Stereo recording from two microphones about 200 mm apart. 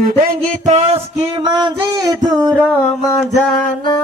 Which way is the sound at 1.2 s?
25° right (ahead or behind).